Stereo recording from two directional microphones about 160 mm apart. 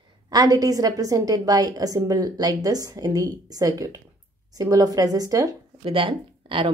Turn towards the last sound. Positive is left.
turn(degrees=-30)  # may be behind; listen again after turning